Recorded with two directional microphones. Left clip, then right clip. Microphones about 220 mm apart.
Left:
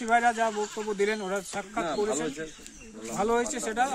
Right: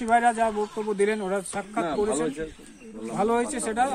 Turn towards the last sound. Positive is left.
turn(degrees=-5)  # may be behind; listen again after turning